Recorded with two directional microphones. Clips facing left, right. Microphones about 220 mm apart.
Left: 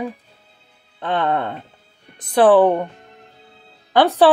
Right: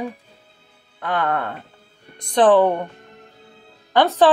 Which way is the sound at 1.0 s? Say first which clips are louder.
Left 2 dB; 25° left (ahead or behind).